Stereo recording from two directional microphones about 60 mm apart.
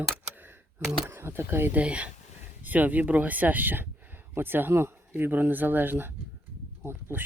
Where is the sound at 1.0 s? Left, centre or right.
Right.